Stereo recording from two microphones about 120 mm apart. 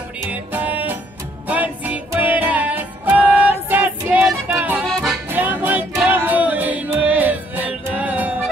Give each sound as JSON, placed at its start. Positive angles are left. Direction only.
{"t": 0.3, "sound": "music", "side_deg": -15}
{"t": 4.8, "sound": "music", "side_deg": 5}
{"t": 5.3, "sound": "music", "side_deg": -15}